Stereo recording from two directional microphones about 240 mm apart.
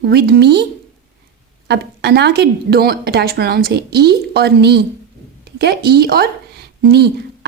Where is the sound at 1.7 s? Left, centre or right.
Right.